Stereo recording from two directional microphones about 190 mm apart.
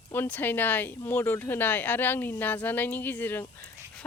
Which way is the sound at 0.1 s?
10° left (ahead or behind).